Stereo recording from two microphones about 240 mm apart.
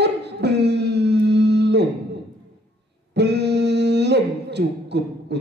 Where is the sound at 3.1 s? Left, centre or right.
Right.